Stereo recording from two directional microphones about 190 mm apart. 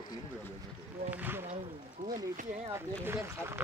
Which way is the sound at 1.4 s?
30° right (ahead or behind).